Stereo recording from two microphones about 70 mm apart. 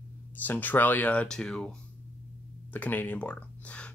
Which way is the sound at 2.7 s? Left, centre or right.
Left.